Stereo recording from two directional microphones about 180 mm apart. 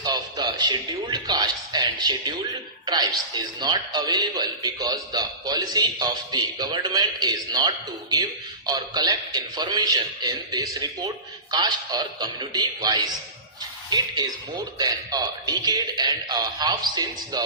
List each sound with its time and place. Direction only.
0.0 s a man's voice: 25° right (ahead or behind)
14.8 s a man's voice: 20° right (ahead or behind)